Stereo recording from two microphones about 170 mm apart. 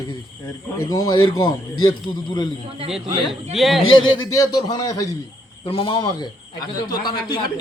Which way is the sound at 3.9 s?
20° left (ahead or behind).